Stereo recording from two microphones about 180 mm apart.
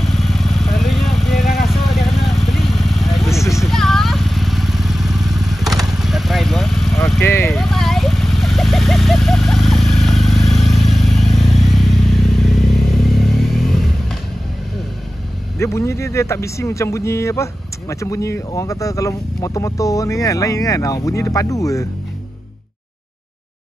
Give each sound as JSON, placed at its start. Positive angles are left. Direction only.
{"t": 0.0, "sound": "vehicle", "side_deg": 0}
{"t": 7.2, "sound": "vehicle", "side_deg": 15}
{"t": 7.5, "sound": "vehicle", "side_deg": 0}
{"t": 15.6, "sound": "speech", "side_deg": 15}